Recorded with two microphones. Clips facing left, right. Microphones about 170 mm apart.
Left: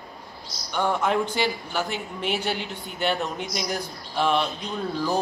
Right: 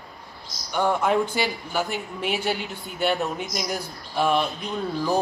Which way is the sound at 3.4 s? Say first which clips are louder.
Even; 45° right (ahead or behind).